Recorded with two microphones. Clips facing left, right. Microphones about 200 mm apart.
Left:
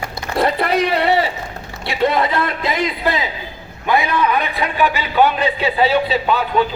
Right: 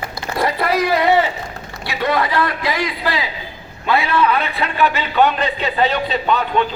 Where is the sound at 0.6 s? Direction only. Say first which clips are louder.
Even; 65° left (ahead or behind).